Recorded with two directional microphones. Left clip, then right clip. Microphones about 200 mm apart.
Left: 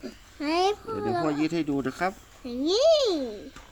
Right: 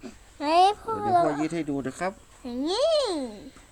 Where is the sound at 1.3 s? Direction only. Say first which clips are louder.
Left 1 dB; 5° right (ahead or behind).